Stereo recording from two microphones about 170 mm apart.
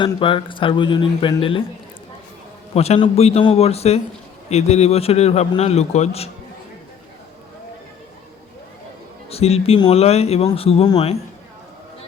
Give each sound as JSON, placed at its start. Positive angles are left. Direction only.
{"t": 0.0, "sound": "speech", "side_deg": 30}
{"t": 2.7, "sound": "a man's voice", "side_deg": 35}
{"t": 9.3, "sound": "a man's voice", "side_deg": 35}